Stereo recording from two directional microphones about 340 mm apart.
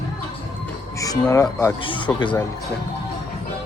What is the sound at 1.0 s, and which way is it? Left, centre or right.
Speech, centre.